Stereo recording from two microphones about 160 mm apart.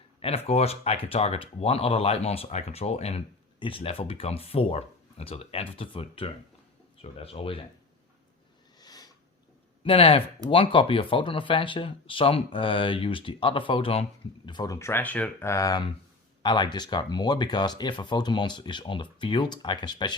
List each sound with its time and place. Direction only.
0.2 s speech: 40° left (ahead or behind)
8.8 s a sound: 25° left (ahead or behind)
9.8 s speech: 35° left (ahead or behind)